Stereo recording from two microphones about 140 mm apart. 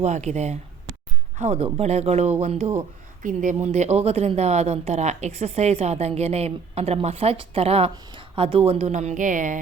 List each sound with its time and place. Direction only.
0.0 s a woman's voice: 55° right (ahead or behind)
3.2 s a woman's voice: 60° right (ahead or behind)